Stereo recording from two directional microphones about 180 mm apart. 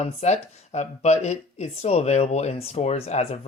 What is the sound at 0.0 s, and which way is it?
Speech, 40° left (ahead or behind).